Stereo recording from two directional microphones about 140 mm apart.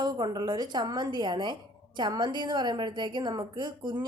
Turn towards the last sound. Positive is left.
turn(degrees=-30)  # may be behind; listen again after turning